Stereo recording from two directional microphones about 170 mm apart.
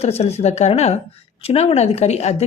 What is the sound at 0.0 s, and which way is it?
Speech, 40° left (ahead or behind).